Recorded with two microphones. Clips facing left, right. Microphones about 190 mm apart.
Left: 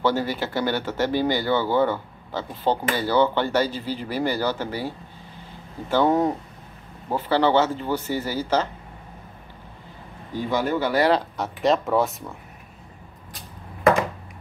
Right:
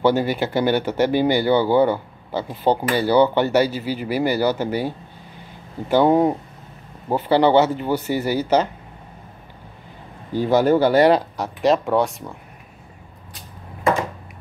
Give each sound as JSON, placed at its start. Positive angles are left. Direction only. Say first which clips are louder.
{"t": 0.0, "sound": "speech", "louder": "right 5 dB", "side_deg": -15}
{"t": 10.3, "sound": "speech", "louder": "right 8 dB", "side_deg": -35}
{"t": 11.3, "sound": "speech", "louder": "right 3 dB", "side_deg": 0}